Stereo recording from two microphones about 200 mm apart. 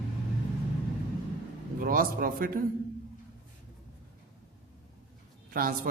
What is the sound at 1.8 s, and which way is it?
Speech, 45° right (ahead or behind).